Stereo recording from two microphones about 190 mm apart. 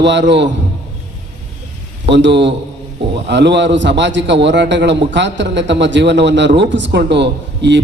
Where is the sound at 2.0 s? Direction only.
70° right (ahead or behind).